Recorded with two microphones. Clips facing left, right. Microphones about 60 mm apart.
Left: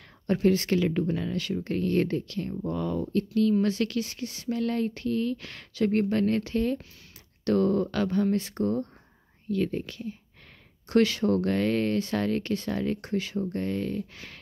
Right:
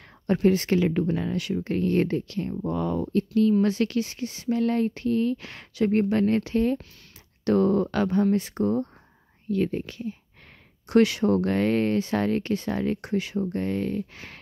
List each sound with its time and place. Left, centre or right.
0.3 s speech: right